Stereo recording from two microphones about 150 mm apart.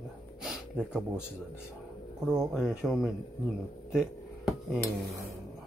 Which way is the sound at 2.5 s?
5° right (ahead or behind).